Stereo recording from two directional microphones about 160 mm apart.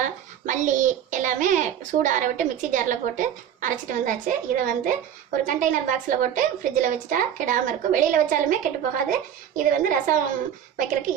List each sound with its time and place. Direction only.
0.0 s a child's voice: 50° right (ahead or behind)